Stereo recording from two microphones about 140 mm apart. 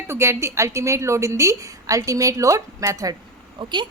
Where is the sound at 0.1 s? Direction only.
20° right (ahead or behind).